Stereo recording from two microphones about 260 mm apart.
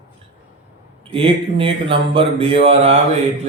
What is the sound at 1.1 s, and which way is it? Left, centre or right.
Mantra, right.